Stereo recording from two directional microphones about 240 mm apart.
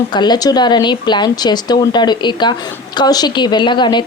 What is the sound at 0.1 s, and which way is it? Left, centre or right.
A woman's voice, centre.